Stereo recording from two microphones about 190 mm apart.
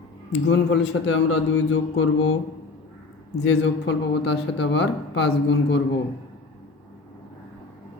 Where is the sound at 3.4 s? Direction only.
65° left (ahead or behind).